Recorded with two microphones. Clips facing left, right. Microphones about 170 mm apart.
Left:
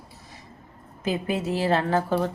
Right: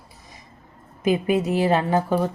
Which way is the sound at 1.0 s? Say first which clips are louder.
Right 6 dB; 15° right (ahead or behind).